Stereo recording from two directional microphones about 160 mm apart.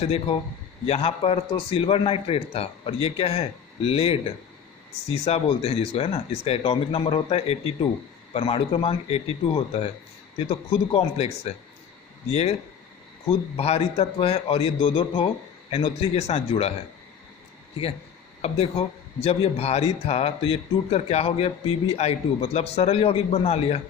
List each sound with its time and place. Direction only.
0.0 s speech: 40° left (ahead or behind)
13.6 s speech: 40° left (ahead or behind)
18.4 s speech: 40° left (ahead or behind)